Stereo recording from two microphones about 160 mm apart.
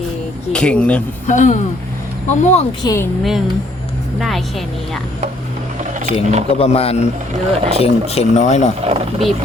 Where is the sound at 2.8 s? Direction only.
20° left (ahead or behind).